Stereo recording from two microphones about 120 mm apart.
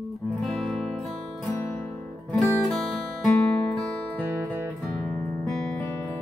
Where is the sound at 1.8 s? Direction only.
15° left (ahead or behind).